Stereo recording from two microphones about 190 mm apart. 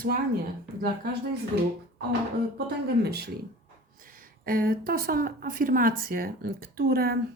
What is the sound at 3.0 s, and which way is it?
Speech, 60° right (ahead or behind).